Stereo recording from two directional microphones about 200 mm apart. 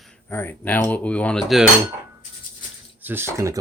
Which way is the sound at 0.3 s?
10° left (ahead or behind).